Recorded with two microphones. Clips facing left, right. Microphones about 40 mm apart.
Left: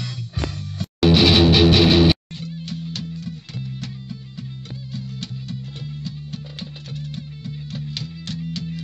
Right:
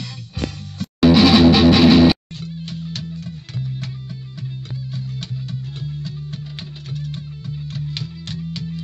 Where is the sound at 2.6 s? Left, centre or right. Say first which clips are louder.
Even; right.